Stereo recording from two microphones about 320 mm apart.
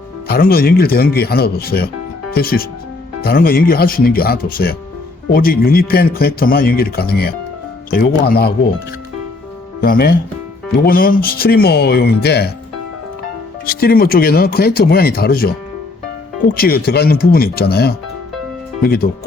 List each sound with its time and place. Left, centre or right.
0.3 s a man's voice: left
9.8 s a man's voice: left
13.7 s a man's voice: left
16.6 s a man's voice: left